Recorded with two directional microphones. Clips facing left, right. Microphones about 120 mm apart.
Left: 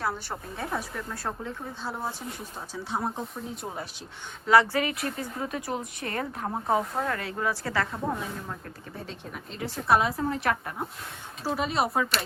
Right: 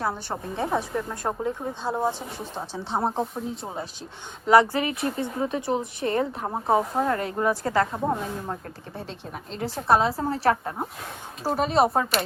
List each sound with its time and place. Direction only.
0.0 s speech: 20° right (ahead or behind)
9.7 s a woman's voice: 30° right (ahead or behind)
11.4 s speech: 40° right (ahead or behind)
11.7 s a woman's voice: 30° right (ahead or behind)